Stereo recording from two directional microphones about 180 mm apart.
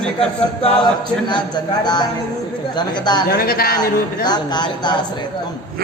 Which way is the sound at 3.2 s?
55° left (ahead or behind).